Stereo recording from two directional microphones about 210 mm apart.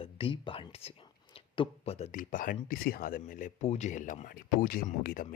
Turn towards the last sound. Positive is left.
turn(degrees=45)  # may be behind; listen again after turning